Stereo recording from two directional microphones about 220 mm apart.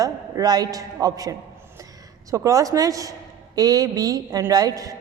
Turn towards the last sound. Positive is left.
turn(degrees=-15)  # may be behind; listen again after turning